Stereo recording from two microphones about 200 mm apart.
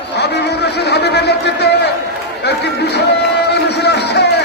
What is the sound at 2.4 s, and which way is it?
Chatter, 55° left (ahead or behind).